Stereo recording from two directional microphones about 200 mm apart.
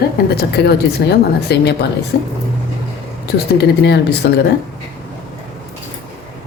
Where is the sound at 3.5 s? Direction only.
55° left (ahead or behind).